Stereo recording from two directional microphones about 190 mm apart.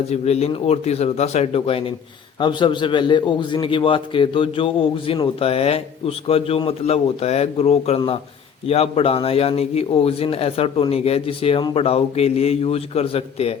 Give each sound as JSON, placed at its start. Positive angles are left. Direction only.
{"t": 0.1, "sound": "a man's voice", "side_deg": 35}